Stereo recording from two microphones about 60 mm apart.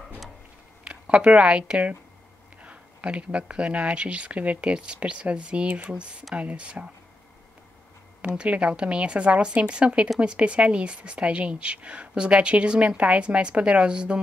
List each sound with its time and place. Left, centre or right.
0.8 s a woman's voice: centre
8.4 s a woman's voice: centre